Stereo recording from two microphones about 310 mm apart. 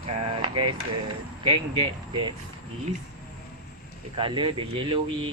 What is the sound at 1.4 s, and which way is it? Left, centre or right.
Speech, centre.